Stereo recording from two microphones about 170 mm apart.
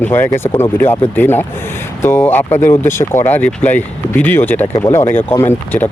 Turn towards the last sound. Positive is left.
turn(degrees=15)  # may be behind; listen again after turning